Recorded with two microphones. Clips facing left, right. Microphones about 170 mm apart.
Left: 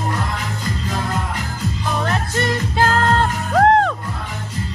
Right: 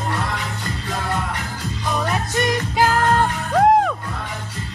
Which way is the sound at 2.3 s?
15° right (ahead or behind).